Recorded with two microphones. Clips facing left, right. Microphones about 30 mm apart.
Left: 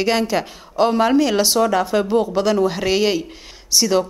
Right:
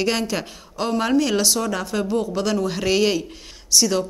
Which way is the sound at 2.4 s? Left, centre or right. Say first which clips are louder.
Left 4 dB; centre.